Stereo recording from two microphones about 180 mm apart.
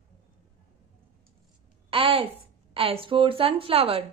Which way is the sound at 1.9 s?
30° right (ahead or behind).